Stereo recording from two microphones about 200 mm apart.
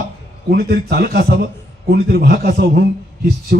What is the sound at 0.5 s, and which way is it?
A man's voice, 55° right (ahead or behind).